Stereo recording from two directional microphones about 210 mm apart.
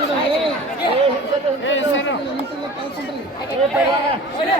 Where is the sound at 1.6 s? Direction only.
65° left (ahead or behind).